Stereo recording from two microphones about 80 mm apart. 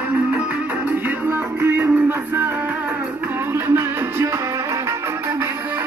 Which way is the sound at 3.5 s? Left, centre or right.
Right.